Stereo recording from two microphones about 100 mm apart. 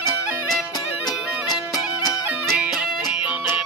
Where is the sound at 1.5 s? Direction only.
40° left (ahead or behind).